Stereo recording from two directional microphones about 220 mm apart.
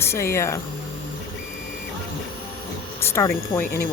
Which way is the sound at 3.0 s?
10° left (ahead or behind).